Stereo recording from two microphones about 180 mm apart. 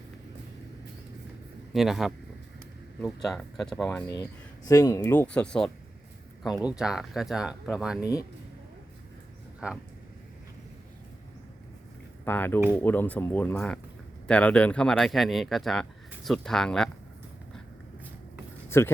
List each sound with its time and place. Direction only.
1.7 s speech: centre (ahead or behind)
3.8 s speech: 20° left (ahead or behind); by 7.9 s 5° right (ahead or behind)
12.2 s speech: 10° left (ahead or behind)
18.7 s speech: 15° left (ahead or behind)